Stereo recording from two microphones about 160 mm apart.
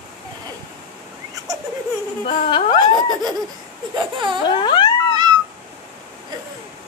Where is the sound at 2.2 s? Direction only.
35° left (ahead or behind).